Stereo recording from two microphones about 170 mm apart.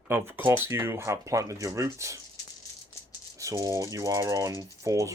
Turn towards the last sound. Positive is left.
turn(degrees=-20)  # may be behind; listen again after turning